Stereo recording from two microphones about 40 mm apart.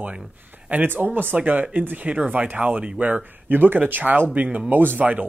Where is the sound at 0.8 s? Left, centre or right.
Right.